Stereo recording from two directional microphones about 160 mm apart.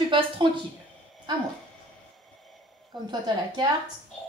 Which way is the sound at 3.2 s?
30° right (ahead or behind).